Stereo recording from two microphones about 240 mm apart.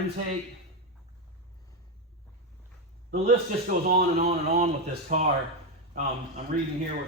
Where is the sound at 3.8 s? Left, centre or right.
Right.